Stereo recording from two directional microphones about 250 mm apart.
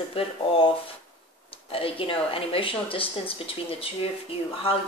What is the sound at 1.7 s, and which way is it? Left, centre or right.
Speech, left.